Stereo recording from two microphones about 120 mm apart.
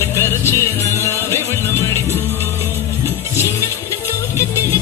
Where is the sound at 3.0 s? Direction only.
20° left (ahead or behind).